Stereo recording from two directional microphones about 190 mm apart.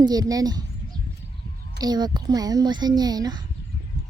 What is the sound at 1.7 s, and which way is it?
A child's voice, 20° right (ahead or behind).